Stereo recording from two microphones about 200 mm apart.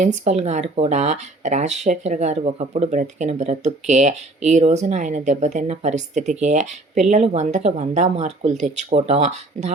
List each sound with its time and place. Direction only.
0.0 s speech: 35° right (ahead or behind)